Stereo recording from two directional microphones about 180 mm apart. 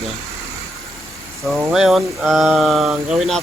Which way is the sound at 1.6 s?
5° right (ahead or behind).